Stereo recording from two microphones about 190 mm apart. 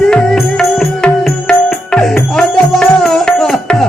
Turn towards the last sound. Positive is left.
turn(degrees=0)  # may be behind; listen again after turning